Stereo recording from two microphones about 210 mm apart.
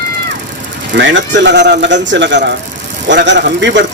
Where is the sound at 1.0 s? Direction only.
60° right (ahead or behind).